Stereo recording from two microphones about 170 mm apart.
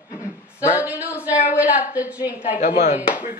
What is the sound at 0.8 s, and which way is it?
A woman's voice, 10° right (ahead or behind).